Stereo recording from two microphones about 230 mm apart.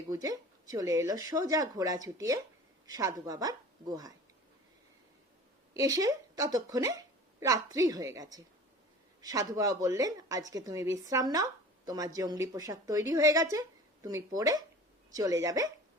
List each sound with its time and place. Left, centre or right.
0.1 s a woman's voice: centre
5.7 s a woman's voice: centre